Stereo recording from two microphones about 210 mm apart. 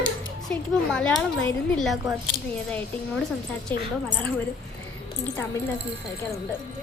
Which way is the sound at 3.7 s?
10° left (ahead or behind).